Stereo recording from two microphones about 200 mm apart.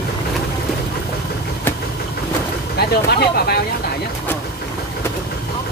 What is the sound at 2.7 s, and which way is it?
Speech, 50° left (ahead or behind).